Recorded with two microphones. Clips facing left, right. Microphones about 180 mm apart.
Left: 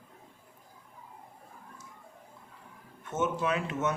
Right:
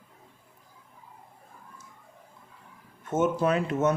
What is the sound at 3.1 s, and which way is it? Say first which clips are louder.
Speech: right 6 dB; 40° right (ahead or behind).